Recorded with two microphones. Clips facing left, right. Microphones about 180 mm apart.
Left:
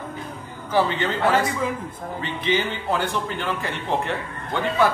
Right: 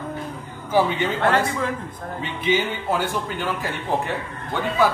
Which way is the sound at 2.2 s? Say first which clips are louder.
Right 1 dB; 10° right (ahead or behind).